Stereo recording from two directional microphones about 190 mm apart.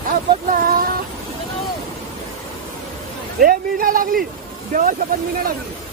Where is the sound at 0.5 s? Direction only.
50° right (ahead or behind).